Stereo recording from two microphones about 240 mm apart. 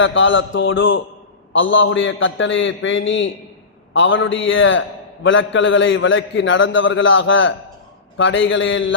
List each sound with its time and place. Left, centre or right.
0.0 s a man's voice: left